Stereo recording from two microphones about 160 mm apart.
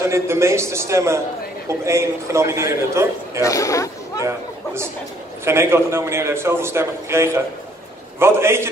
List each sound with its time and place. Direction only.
0.0 s a man's voice: 15° right (ahead or behind)
3.4 s speech: 20° left (ahead or behind)
5.4 s a man's voice: 15° right (ahead or behind)